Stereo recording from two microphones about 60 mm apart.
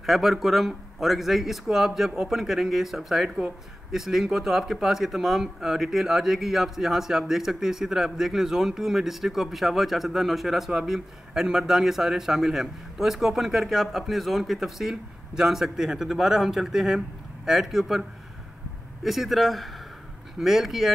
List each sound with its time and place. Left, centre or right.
0.0 s speech: centre
19.0 s speech: centre